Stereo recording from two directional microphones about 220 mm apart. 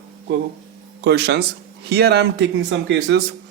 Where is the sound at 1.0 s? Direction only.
50° right (ahead or behind).